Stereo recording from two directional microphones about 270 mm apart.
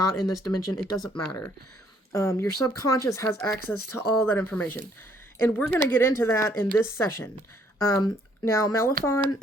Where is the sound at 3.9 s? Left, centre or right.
Centre.